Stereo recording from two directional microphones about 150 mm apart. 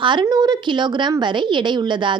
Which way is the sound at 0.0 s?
30° right (ahead or behind).